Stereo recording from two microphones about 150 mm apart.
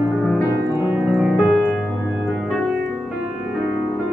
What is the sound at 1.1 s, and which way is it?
Music, centre (ahead or behind).